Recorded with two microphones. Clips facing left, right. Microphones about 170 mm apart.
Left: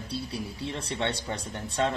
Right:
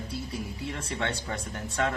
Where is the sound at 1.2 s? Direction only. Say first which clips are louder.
Even; 20° left (ahead or behind).